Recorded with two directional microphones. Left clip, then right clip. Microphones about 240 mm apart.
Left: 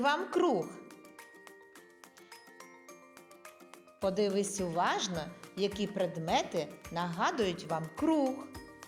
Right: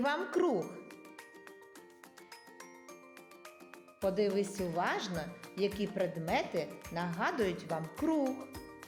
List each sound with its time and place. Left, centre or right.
0.0 s speech: left
4.0 s speech: centre
8.3 s music: centre